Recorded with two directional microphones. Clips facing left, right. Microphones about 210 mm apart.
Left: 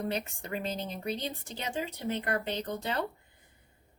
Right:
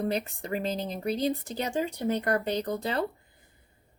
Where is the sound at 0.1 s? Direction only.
35° right (ahead or behind).